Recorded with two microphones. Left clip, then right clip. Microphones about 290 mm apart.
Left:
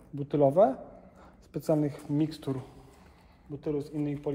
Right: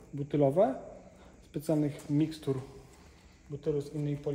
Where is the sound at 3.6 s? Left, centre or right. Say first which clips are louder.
Left 1 dB; left.